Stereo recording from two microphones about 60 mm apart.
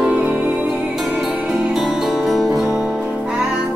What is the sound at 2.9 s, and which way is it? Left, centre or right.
Music, centre.